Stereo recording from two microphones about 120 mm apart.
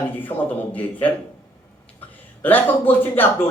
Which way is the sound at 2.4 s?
15° left (ahead or behind).